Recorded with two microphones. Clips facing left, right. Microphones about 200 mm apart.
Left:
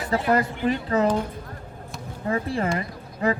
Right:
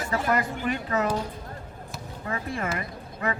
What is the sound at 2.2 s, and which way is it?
Speech, 30° left (ahead or behind).